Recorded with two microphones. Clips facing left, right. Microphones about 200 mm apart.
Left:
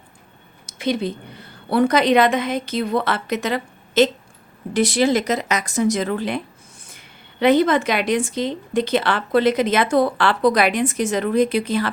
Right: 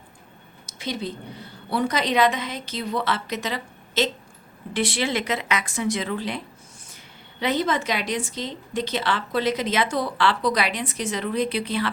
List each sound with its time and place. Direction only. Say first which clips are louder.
0.7 s a woman's voice: left 8 dB; 60° left (ahead or behind)
4.7 s a woman's voice: left 7 dB; 40° left (ahead or behind)